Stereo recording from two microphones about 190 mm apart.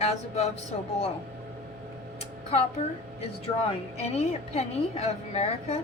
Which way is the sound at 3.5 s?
25° left (ahead or behind).